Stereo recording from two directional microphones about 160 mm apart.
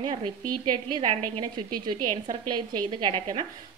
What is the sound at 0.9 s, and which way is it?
A woman's voice, 30° right (ahead or behind).